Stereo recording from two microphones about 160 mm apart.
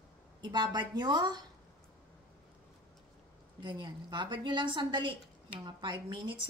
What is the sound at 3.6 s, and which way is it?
A woman's voice, 25° right (ahead or behind).